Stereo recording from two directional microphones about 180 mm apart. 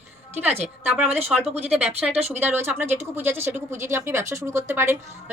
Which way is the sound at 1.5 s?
35° right (ahead or behind).